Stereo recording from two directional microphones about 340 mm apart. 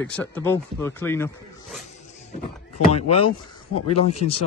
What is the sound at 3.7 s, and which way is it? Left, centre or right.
Speech, left.